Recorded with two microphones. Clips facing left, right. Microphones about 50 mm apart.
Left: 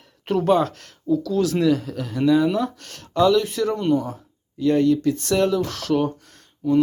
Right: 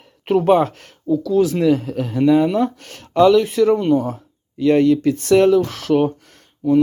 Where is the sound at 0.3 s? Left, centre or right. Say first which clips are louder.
Right 4 dB; right.